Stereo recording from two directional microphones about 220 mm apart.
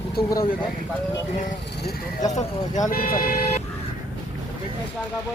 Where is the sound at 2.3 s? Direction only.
35° left (ahead or behind).